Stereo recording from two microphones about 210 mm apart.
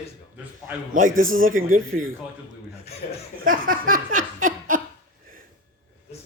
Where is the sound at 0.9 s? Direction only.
40° right (ahead or behind).